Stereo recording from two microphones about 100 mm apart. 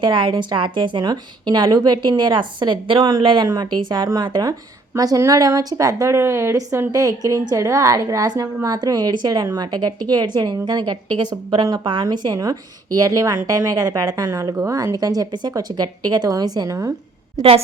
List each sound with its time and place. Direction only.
0.0 s a woman's voice: 55° right (ahead or behind)
11.9 s a woman's voice: 50° right (ahead or behind); by 16.9 s 30° right (ahead or behind)